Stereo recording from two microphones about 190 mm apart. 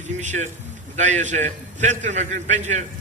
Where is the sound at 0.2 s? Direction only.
40° right (ahead or behind).